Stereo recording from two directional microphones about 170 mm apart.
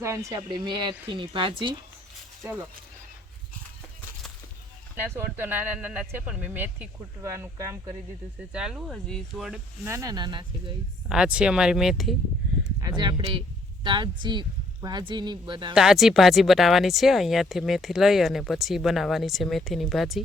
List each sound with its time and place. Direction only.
0.0 s speech: 15° right (ahead or behind)
2.4 s speech: 10° right (ahead or behind)
4.9 s speech: 10° right (ahead or behind)
8.5 s speech: 5° right (ahead or behind)
9.8 s speech: 20° right (ahead or behind)
11.1 s speech: 5° right (ahead or behind)
13.0 s speech: 25° right (ahead or behind)
15.7 s speech: 5° right (ahead or behind)